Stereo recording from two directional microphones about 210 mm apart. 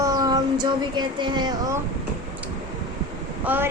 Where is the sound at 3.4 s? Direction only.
10° right (ahead or behind).